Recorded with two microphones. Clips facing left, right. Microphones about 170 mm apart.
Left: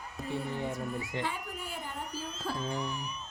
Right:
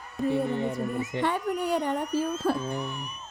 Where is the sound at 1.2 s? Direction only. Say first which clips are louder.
Right 10 dB; 70° right (ahead or behind); by 2.6 s 55° right (ahead or behind).